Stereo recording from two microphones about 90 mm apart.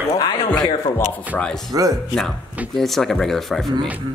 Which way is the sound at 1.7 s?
45° right (ahead or behind).